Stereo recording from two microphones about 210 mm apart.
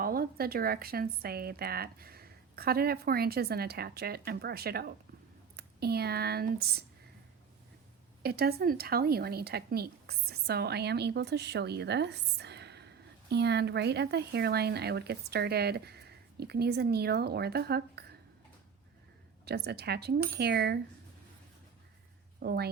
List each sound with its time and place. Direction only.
0.0 s speech: 45° right (ahead or behind)
8.2 s speech: 50° right (ahead or behind)
19.5 s speech: 50° right (ahead or behind)
22.4 s a woman's voice: 50° right (ahead or behind)